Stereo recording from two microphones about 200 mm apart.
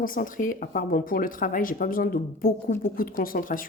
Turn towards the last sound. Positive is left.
turn(degrees=45)  # may be behind; listen again after turning